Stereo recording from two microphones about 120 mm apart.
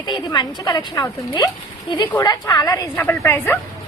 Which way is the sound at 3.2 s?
20° left (ahead or behind).